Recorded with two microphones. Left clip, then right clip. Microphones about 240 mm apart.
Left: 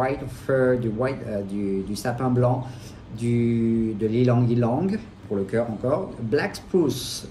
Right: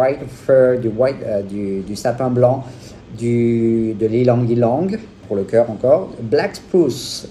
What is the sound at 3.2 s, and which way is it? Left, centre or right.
Speech, right.